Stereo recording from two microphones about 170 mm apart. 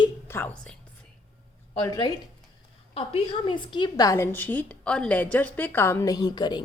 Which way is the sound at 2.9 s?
30° left (ahead or behind).